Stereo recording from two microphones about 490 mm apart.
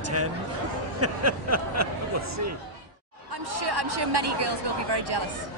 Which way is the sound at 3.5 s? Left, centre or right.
Right.